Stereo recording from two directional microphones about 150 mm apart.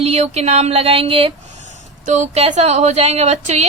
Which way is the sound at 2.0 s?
50° right (ahead or behind).